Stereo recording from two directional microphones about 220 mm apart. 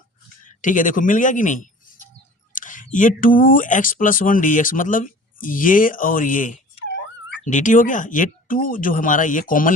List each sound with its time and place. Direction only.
0.4 s speech: 35° left (ahead or behind)
6.8 s a sound: 55° left (ahead or behind)
7.4 s speech: 35° left (ahead or behind)